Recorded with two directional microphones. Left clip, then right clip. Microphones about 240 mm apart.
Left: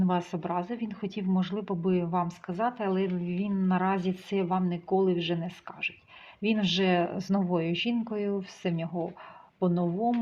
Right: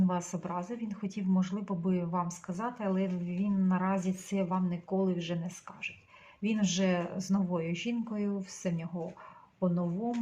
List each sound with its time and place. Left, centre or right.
0.0 s speech: left